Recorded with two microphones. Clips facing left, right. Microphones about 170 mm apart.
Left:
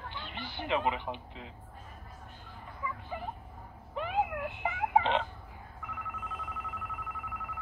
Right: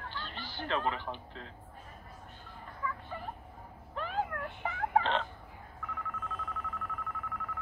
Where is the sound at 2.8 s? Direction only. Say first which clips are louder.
Right 1 dB; 10° left (ahead or behind).